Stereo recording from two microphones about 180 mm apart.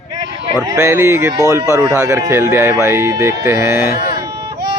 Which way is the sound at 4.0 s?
50° left (ahead or behind).